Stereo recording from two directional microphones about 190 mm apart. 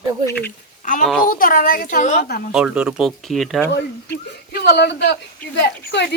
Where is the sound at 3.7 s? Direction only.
60° left (ahead or behind).